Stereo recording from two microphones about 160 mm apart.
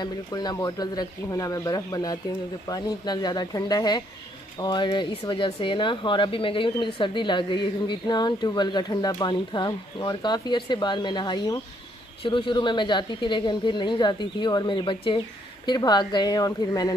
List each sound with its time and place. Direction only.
0.0 s speech: 25° left (ahead or behind)